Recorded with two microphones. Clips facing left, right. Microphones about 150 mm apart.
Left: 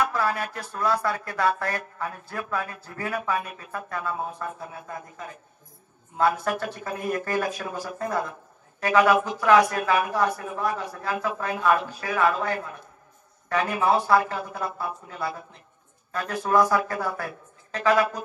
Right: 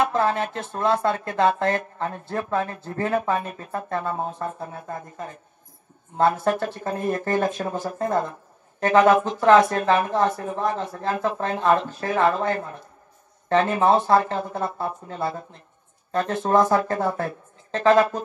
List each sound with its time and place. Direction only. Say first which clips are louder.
0.0 s speech: right 4 dB; 25° right (ahead or behind)
6.1 s a woman's voice: right 3 dB; 25° right (ahead or behind)